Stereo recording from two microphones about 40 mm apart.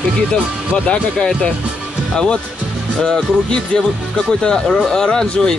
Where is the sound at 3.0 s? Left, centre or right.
Centre.